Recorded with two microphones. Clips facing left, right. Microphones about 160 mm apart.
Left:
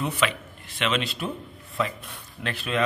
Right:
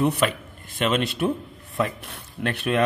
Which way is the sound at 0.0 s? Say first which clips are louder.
Right 5 dB; 55° right (ahead or behind).